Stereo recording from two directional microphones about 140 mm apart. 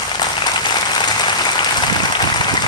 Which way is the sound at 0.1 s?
30° left (ahead or behind).